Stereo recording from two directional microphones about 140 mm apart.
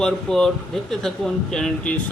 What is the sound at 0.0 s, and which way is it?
Speech, 5° left (ahead or behind).